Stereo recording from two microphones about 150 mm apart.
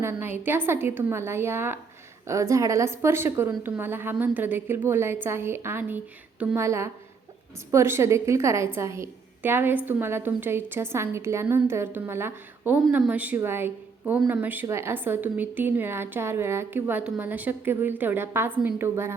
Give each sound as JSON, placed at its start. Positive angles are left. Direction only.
{"t": 0.0, "sound": "a woman's voice", "side_deg": -15}
{"t": 14.0, "sound": "a woman's voice", "side_deg": 0}